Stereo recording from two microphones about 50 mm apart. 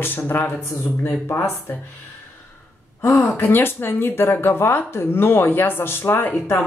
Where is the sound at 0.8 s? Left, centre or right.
Left.